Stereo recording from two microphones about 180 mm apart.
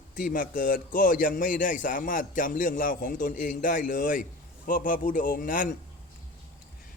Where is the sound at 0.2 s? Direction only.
50° left (ahead or behind).